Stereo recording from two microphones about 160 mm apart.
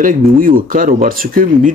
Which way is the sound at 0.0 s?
60° right (ahead or behind).